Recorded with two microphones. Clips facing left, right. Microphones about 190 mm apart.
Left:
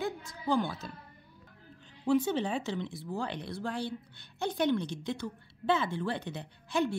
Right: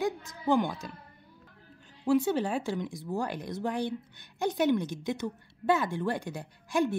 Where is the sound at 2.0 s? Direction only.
10° right (ahead or behind).